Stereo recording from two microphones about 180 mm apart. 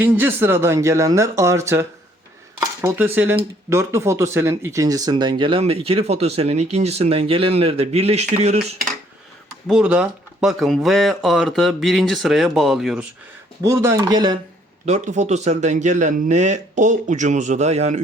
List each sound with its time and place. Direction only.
0.0 s speech: 10° right (ahead or behind); by 8.5 s 40° right (ahead or behind)
9.6 s speech: 5° right (ahead or behind)
13.7 s speech: 15° right (ahead or behind)
14.8 s speech: 40° right (ahead or behind)